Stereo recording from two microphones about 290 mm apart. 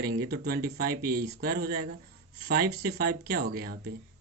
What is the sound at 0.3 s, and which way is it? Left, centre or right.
Speech, right.